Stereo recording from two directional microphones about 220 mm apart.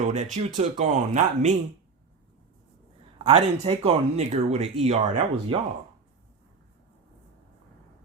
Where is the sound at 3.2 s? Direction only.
25° right (ahead or behind).